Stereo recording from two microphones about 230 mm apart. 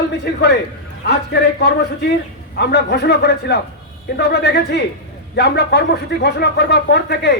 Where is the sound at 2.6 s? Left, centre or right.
Left.